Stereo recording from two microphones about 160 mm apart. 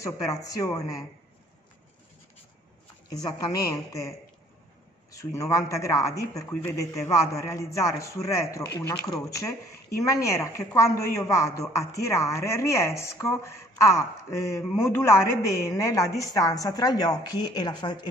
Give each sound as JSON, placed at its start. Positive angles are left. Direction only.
{"t": 0.0, "sound": "a man's voice", "side_deg": 20}
{"t": 3.1, "sound": "a man's voice", "side_deg": 25}
{"t": 5.1, "sound": "a man's voice", "side_deg": 20}